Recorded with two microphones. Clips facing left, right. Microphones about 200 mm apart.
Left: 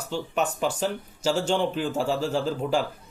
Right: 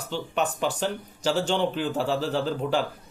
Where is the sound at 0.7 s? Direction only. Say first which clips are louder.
Left 1 dB; 5° left (ahead or behind).